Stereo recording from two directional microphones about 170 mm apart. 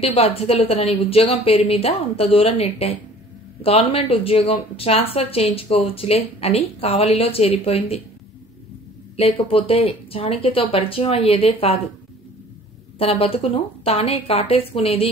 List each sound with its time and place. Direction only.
0.0 s a woman's voice: 35° left (ahead or behind)
9.1 s a woman's voice: 35° left (ahead or behind)
13.0 s a woman's voice: 35° left (ahead or behind)